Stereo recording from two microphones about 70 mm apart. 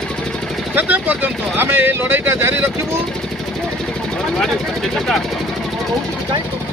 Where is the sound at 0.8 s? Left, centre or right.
Right.